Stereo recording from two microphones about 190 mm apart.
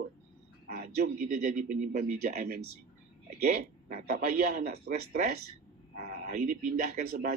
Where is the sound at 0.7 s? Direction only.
45° right (ahead or behind).